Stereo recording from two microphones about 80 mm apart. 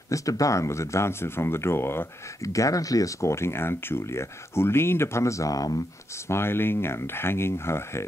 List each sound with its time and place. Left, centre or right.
0.1 s speech: left
6.1 s speech: left